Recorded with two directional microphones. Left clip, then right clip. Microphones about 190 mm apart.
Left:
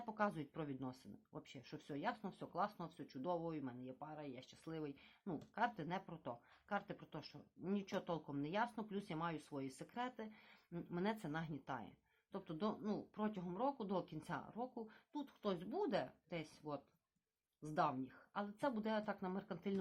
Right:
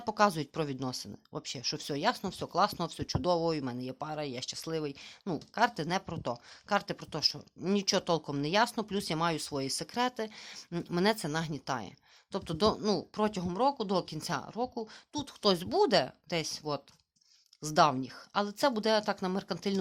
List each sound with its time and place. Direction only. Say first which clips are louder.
0.0 s speech: right 15 dB; 45° right (ahead or behind)